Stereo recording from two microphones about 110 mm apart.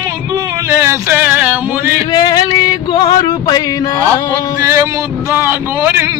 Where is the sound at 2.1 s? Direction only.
40° left (ahead or behind).